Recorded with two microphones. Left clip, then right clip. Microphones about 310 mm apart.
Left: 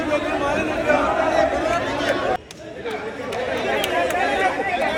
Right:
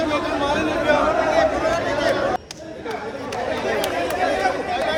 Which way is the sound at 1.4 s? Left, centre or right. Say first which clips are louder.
Right 1 dB; right.